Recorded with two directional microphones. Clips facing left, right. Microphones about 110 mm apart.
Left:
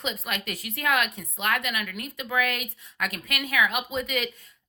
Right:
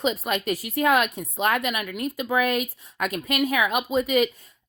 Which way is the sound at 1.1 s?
20° right (ahead or behind).